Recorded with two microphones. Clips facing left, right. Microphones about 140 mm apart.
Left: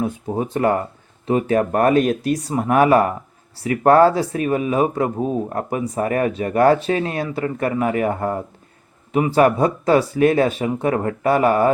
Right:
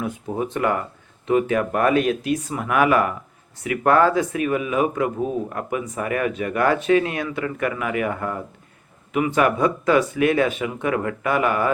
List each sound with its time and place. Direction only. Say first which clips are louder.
0.5 s speech: left 6 dB; 35° left (ahead or behind)